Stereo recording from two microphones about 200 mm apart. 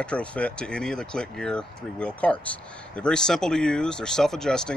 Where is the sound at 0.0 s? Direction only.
5° left (ahead or behind).